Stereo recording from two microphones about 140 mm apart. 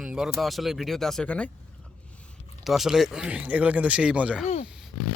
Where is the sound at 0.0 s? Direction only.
5° right (ahead or behind).